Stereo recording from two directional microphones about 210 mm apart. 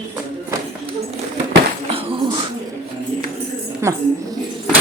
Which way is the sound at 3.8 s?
15° right (ahead or behind).